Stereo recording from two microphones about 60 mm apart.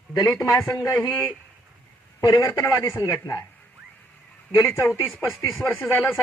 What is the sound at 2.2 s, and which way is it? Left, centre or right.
Speech, left.